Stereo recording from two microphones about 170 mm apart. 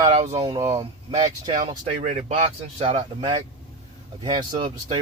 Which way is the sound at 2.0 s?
45° right (ahead or behind).